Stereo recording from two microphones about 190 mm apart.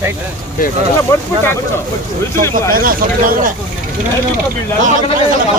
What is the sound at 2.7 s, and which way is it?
Speech, 50° right (ahead or behind).